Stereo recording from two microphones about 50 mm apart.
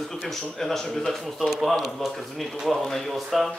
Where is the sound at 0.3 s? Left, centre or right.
Centre.